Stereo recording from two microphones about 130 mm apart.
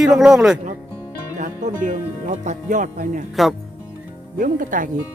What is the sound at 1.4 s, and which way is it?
Speech, 70° right (ahead or behind).